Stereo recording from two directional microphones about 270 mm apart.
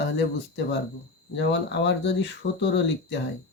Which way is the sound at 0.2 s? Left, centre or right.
Left.